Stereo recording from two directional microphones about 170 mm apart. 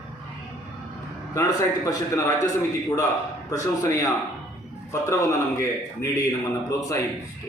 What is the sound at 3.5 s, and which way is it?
A man's voice, 20° left (ahead or behind).